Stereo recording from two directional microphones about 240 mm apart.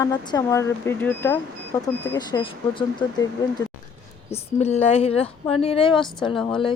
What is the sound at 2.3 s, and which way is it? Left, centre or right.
A woman's voice, left.